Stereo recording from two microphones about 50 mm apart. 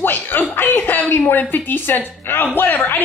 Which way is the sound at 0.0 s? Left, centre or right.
Left.